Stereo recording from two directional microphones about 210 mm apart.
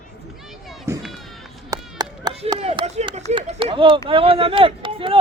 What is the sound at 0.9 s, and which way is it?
Run, 10° right (ahead or behind).